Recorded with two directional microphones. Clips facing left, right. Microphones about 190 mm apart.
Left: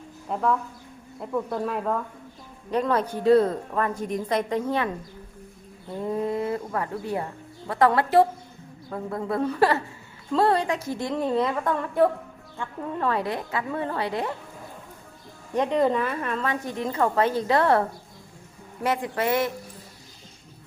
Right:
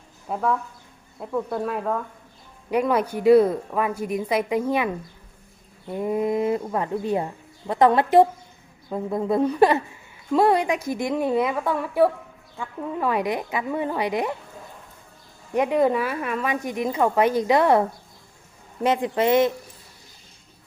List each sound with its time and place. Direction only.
0.3 s a woman's voice: 5° right (ahead or behind)
15.5 s a woman's voice: 10° right (ahead or behind)